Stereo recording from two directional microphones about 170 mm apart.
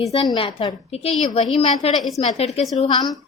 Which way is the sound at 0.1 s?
30° left (ahead or behind).